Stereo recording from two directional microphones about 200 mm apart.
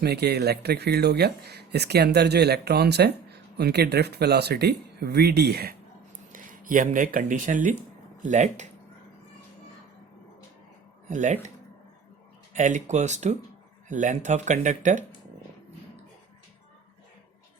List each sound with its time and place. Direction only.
0.0 s speech: 55° right (ahead or behind)
6.3 s speech: 40° right (ahead or behind)
11.1 s speech: 40° right (ahead or behind)
12.5 s speech: 35° right (ahead or behind)